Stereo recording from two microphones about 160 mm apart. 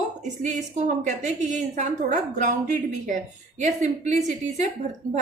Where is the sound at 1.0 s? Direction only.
50° right (ahead or behind).